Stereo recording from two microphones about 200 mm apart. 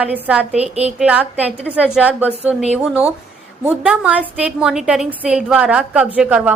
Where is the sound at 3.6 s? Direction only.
5° right (ahead or behind).